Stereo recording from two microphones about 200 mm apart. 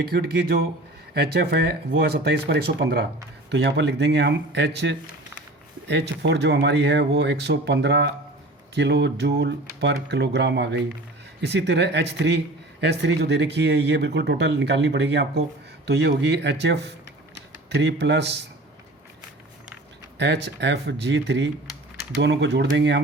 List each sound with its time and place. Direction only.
0.0 s speech: 50° right (ahead or behind)
20.1 s speech: 60° right (ahead or behind)